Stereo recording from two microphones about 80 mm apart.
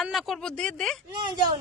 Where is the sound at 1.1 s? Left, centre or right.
Right.